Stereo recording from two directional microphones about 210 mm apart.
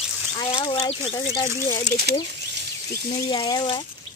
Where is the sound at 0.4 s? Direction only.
25° left (ahead or behind).